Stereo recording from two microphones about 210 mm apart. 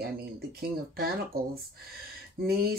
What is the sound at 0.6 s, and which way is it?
Speech, 45° right (ahead or behind).